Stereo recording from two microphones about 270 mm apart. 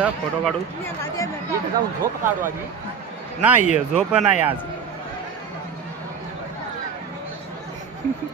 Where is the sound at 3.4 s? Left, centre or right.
Centre.